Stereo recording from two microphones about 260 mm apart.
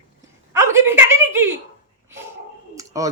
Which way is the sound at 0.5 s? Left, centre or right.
Centre.